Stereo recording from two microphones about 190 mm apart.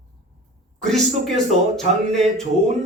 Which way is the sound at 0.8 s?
Centre (ahead or behind).